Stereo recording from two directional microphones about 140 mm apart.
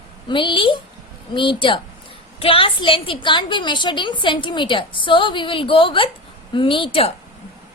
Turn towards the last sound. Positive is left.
turn(degrees=40)  # may be behind; listen again after turning